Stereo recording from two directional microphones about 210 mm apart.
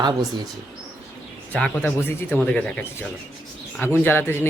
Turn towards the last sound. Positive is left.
turn(degrees=10)  # may be behind; listen again after turning